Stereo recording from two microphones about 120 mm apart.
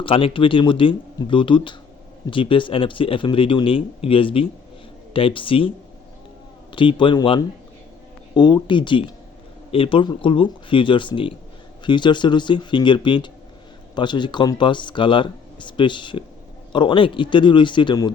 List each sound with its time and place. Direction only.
0.0 s speech: 45° left (ahead or behind)